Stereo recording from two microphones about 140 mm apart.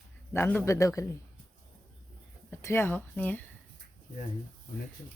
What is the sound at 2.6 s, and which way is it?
Speech, 15° left (ahead or behind).